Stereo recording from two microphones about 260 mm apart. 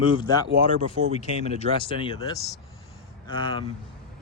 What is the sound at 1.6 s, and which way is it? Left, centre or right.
Speech, right.